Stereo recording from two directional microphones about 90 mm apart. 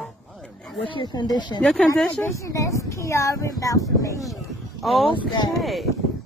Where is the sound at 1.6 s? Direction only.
10° left (ahead or behind).